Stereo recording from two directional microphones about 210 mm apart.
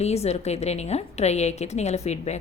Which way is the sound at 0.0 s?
30° left (ahead or behind).